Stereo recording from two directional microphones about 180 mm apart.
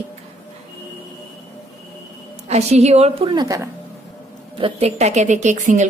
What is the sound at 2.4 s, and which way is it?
A woman's voice, 35° right (ahead or behind).